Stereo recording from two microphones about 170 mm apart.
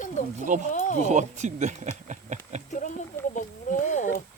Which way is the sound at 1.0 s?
45° right (ahead or behind).